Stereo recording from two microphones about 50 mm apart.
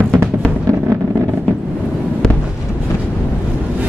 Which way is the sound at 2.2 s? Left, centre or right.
Centre.